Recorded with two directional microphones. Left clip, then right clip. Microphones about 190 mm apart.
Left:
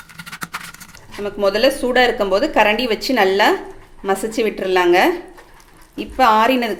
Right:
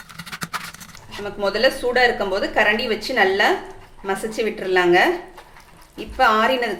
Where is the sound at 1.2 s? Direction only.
40° left (ahead or behind).